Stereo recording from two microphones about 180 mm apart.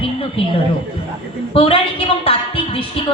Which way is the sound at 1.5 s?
30° left (ahead or behind).